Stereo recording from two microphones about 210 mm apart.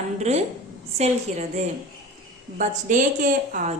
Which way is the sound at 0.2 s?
30° right (ahead or behind).